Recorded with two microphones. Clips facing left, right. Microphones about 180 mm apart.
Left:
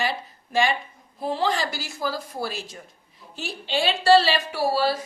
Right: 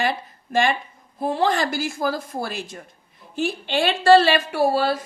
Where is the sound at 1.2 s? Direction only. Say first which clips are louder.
Right 4 dB; 50° right (ahead or behind).